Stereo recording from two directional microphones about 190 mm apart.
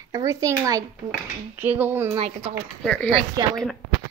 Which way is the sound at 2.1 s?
30° right (ahead or behind).